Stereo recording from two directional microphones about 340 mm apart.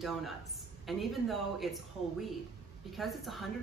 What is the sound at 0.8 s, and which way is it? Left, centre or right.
Speech, centre.